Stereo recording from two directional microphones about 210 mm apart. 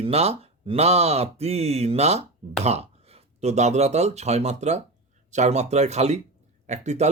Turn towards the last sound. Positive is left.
turn(degrees=-30)  # may be behind; listen again after turning